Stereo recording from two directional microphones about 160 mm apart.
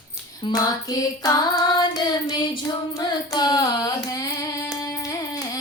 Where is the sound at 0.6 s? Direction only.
25° left (ahead or behind).